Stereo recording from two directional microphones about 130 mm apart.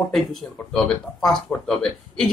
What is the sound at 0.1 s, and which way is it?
Speech, centre (ahead or behind).